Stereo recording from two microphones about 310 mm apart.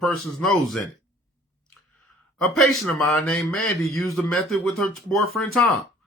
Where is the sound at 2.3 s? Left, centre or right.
Centre.